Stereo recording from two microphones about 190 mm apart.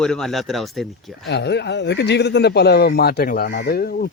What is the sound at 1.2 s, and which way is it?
Speech, 65° left (ahead or behind).